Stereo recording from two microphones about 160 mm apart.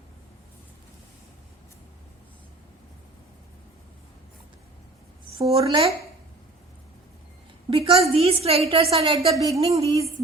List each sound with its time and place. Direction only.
5.4 s a woman's voice: 35° right (ahead or behind)
7.7 s a sound: 35° right (ahead or behind)
8.7 s a woman's voice: 35° right (ahead or behind)